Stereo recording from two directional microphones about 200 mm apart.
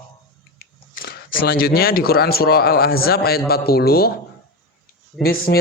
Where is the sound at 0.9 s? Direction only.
50° left (ahead or behind).